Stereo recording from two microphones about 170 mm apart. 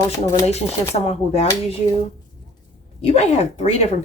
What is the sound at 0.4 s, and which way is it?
Speech, 40° left (ahead or behind).